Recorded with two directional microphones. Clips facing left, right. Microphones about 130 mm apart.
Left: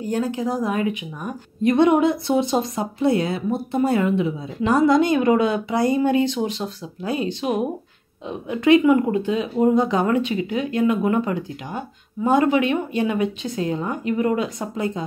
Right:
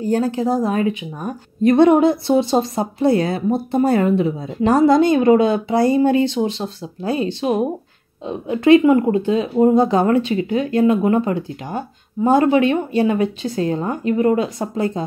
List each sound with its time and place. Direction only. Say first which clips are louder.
0.0 s a woman's voice: right 5 dB; 35° right (ahead or behind)